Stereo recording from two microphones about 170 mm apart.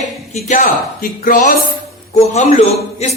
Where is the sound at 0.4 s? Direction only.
45° left (ahead or behind).